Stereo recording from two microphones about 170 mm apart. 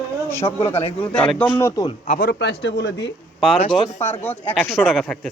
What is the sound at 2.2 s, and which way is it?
Speech, 80° left.